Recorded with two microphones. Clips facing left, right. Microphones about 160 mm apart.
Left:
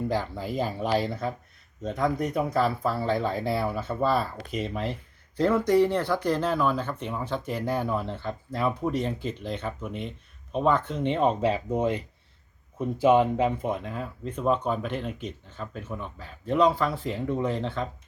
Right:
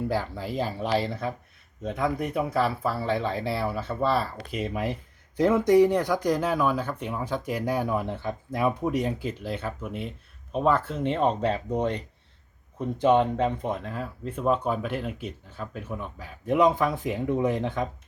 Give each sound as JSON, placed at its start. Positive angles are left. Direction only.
{"t": 0.1, "sound": "speech", "side_deg": -5}